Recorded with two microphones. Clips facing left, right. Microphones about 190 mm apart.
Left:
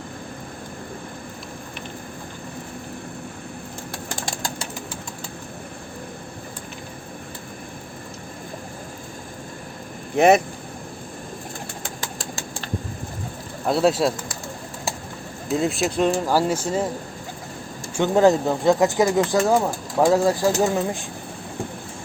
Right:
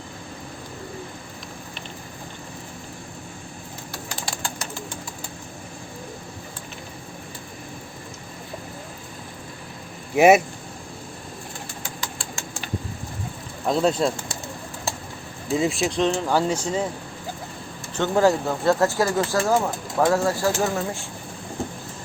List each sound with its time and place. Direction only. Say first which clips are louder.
10.2 s speech: right 1 dB; 5° right (ahead or behind)
11.9 s a sound: left 1 dB; 40° left (ahead or behind)
13.7 s speech: left 2 dB; 5° left (ahead or behind)
15.4 s speech: even; centre (ahead or behind)
17.9 s speech: left 3 dB; 15° left (ahead or behind)